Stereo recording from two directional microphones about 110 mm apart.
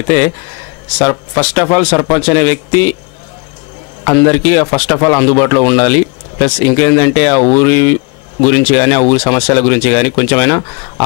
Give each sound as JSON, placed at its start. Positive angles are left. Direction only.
{"t": 0.9, "sound": "a man's voice", "side_deg": 20}
{"t": 4.0, "sound": "a man's voice", "side_deg": 20}